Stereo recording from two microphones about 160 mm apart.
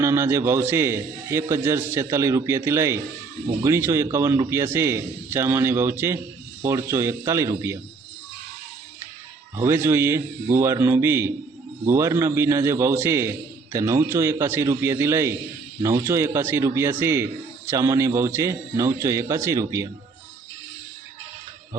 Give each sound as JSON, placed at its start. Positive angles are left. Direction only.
{"t": 0.0, "sound": "a man's voice", "side_deg": -15}
{"t": 9.6, "sound": "a man's voice", "side_deg": -15}